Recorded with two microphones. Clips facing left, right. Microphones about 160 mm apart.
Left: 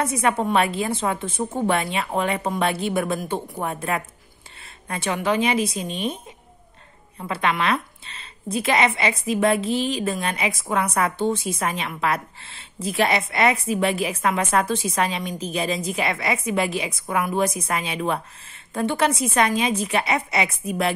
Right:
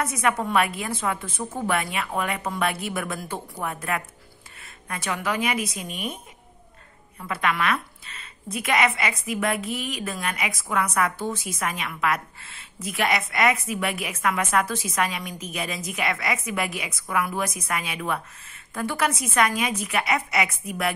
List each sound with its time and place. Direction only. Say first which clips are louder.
0.0 s a woman's voice: left 3 dB; 30° left (ahead or behind)
7.2 s a woman's voice: left 2 dB; 30° left (ahead or behind)